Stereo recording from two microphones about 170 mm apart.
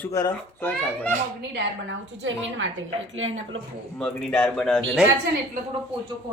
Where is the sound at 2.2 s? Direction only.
90° right.